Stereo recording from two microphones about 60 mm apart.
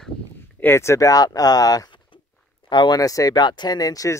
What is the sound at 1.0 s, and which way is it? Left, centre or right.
Speech, left.